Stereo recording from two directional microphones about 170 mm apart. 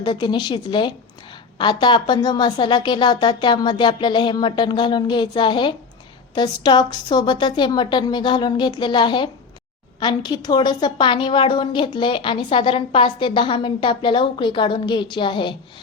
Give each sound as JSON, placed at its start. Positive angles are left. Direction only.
{"t": 0.0, "sound": "a woman's voice", "side_deg": 25}